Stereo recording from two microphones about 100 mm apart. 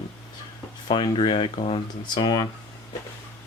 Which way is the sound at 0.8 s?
50° left (ahead or behind).